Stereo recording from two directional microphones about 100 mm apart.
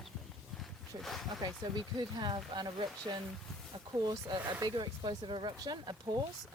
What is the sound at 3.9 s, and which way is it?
Speech, 45° right (ahead or behind).